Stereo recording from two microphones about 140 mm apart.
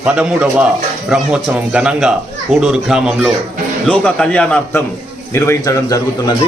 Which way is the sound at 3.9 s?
5° left (ahead or behind).